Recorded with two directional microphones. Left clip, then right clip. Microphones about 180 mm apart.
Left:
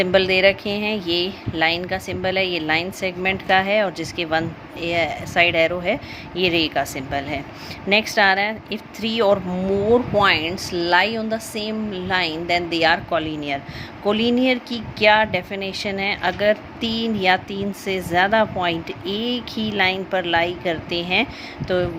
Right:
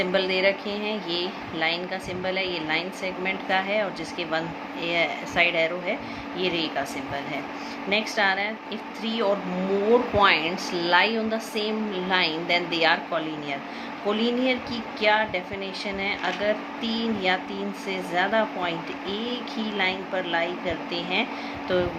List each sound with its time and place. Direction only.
0.0 s speech: 55° left (ahead or behind)